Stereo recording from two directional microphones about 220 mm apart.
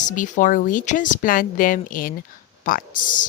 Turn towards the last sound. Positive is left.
turn(degrees=40)  # may be behind; listen again after turning